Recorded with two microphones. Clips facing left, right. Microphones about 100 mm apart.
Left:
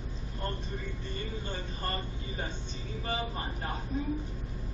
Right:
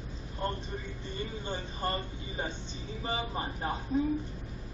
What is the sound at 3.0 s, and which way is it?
Speech, 20° right (ahead or behind).